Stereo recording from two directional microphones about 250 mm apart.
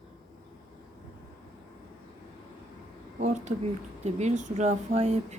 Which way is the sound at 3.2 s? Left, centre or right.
Right.